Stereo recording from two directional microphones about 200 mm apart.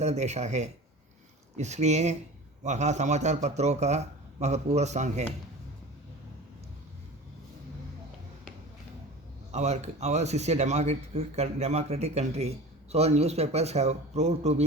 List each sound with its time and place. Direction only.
0.0 s speech: 35° right (ahead or behind)
9.5 s speech: 35° right (ahead or behind)